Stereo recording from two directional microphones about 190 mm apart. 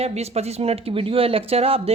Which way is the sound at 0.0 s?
35° right (ahead or behind).